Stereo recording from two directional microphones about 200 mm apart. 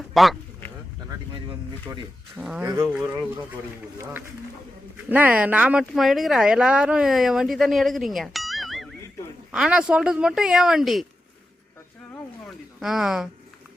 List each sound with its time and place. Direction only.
0.1 s a sound: centre (ahead or behind)
2.4 s speech: 5° right (ahead or behind)
12.8 s speech: centre (ahead or behind)